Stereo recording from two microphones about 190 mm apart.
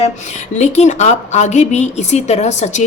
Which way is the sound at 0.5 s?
35° left (ahead or behind).